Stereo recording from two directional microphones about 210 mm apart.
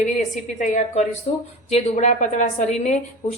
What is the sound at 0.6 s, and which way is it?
Speech, 35° left (ahead or behind).